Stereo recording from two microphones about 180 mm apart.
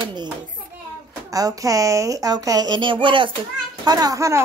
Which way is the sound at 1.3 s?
20° right (ahead or behind).